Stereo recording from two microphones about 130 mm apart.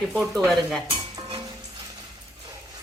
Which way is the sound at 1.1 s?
35° right (ahead or behind).